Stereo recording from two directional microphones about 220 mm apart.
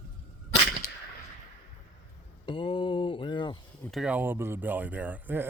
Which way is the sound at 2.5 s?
25° left (ahead or behind).